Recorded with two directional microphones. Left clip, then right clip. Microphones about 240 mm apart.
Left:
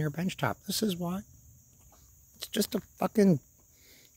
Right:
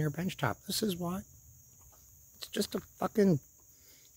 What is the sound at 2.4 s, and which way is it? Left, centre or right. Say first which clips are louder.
Speech: left 3 dB; left.